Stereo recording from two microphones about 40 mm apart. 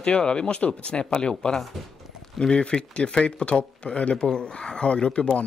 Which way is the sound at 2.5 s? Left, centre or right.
Left.